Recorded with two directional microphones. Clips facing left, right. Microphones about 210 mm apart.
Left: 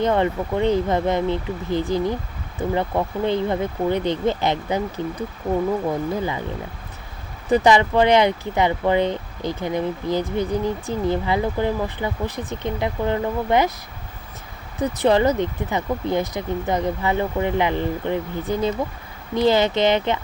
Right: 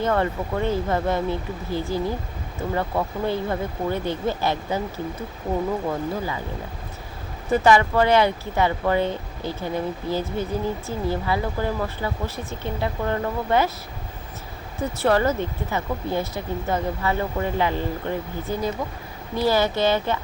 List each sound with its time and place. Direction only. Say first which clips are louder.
0.0 s speech: left 3 dB; 20° left (ahead or behind)
7.5 s speech: left 2 dB; 20° left (ahead or behind)
14.8 s speech: left 3 dB; 15° left (ahead or behind)